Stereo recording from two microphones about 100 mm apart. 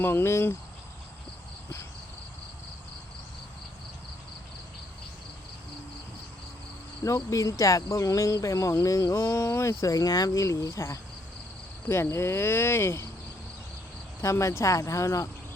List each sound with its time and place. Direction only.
0.0 s speech: 25° left (ahead or behind)
7.0 s speech: 35° left (ahead or behind)
14.2 s speech: 30° left (ahead or behind)